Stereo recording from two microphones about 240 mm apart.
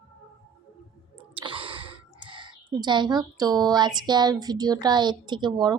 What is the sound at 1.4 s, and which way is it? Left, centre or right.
A woman's voice, right.